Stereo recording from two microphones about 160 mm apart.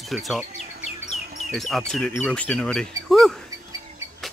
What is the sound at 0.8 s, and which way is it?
Bird, 45° left (ahead or behind).